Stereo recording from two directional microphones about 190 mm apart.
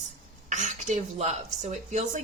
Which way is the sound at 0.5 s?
40° right (ahead or behind).